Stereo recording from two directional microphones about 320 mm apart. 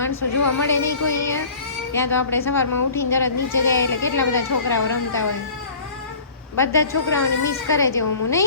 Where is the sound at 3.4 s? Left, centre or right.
Left.